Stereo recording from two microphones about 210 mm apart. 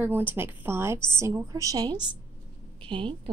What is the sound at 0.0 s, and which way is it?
A woman's voice, 10° right (ahead or behind).